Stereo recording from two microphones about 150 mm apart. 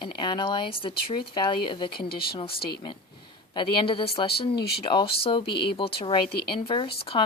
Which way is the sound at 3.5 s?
35° left (ahead or behind).